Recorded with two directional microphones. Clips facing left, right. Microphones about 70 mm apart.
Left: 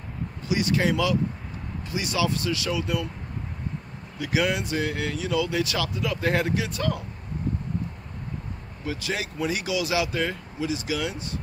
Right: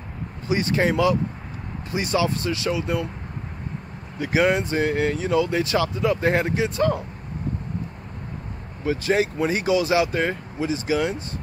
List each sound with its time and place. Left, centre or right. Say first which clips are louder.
0.5 s speech: right 2 dB; right
4.2 s speech: right 5 dB; right
8.8 s speech: right 9 dB; right